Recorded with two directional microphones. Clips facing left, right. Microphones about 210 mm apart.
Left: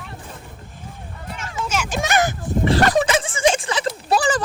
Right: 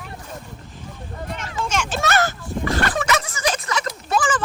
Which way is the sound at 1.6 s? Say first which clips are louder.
Even; 5° left (ahead or behind).